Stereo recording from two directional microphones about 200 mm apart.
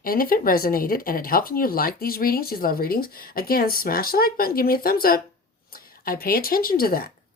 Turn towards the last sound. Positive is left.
turn(degrees=50)  # may be behind; listen again after turning